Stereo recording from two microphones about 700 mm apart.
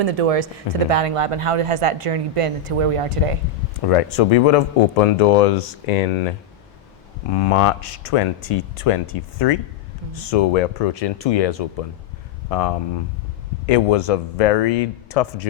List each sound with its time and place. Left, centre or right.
0.0 s speech: right
3.8 s speech: left
7.3 s speech: left